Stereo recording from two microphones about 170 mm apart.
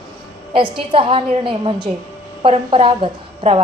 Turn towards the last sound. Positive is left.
turn(degrees=-40)  # may be behind; listen again after turning